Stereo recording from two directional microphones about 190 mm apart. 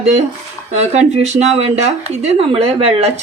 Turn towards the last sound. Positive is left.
turn(degrees=-30)  # may be behind; listen again after turning